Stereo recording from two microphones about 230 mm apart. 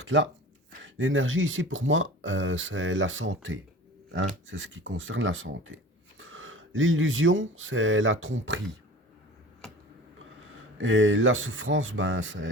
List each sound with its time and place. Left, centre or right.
0.0 s speech: right
9.6 s a sound: centre
10.8 s speech: right